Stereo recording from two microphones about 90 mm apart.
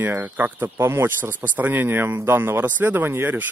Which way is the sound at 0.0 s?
20° right (ahead or behind).